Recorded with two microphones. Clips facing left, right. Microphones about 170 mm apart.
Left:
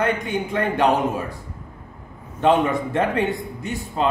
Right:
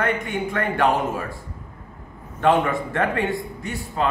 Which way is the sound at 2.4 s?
20° left (ahead or behind).